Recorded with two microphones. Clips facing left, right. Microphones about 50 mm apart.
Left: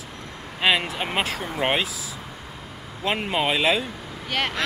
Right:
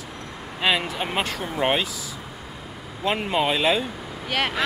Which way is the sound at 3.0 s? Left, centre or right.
Centre.